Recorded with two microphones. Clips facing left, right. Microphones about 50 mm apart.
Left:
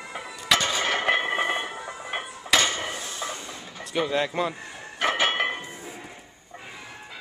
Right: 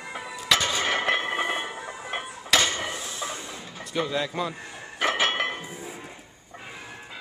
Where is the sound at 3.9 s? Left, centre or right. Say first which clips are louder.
Left 2 dB; centre.